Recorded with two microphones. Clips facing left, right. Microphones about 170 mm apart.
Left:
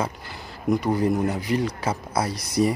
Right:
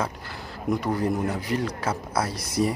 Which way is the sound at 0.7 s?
10° left (ahead or behind).